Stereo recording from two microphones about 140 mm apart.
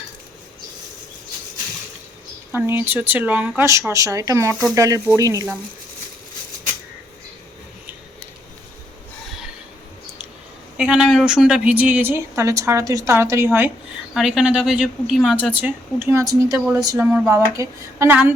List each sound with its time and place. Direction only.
2.5 s speech: 15° right (ahead or behind)
10.8 s a woman's voice: 5° right (ahead or behind)
14.1 s speech: centre (ahead or behind)
15.5 s speech: 15° right (ahead or behind)